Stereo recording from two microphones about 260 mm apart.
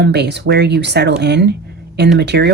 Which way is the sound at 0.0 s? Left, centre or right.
Right.